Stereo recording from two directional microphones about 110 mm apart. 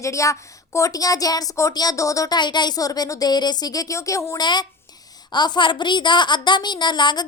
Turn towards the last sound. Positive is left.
turn(degrees=40)  # may be behind; listen again after turning